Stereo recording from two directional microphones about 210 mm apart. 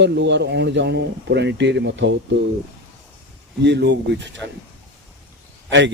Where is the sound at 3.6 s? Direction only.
55° right (ahead or behind).